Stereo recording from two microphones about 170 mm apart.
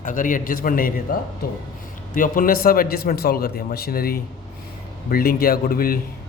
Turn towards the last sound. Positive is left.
turn(degrees=60)  # may be behind; listen again after turning